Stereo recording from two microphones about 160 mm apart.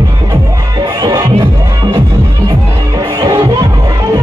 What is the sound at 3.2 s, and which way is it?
Music, 20° right (ahead or behind).